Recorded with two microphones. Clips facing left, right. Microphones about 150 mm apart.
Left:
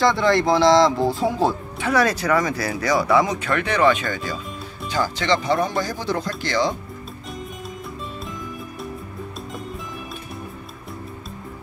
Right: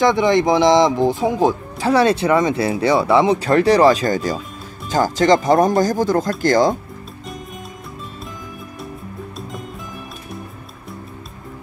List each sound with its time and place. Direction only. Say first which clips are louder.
0.0 s speech: right 3 dB; 20° right (ahead or behind)
1.8 s speech: right 5 dB; 30° right (ahead or behind); by 6.8 s 45° right (ahead or behind)